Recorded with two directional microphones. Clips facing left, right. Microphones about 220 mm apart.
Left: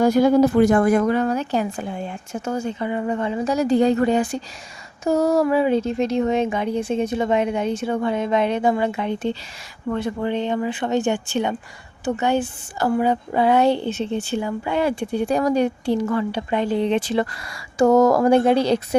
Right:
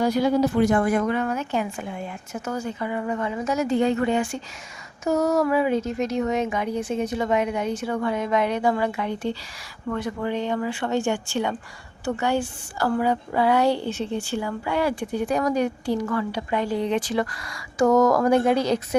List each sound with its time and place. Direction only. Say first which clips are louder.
0.0 s a woman's voice: left 5 dB; 50° left (ahead or behind); by 18.9 s 30° left (ahead or behind)